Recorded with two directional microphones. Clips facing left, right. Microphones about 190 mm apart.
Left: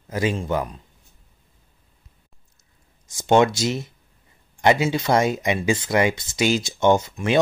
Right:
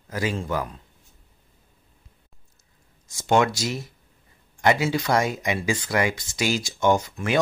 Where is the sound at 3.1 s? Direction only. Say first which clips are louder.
Left 4 dB; 20° left (ahead or behind).